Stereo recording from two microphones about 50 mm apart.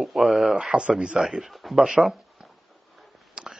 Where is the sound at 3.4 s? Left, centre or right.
Centre.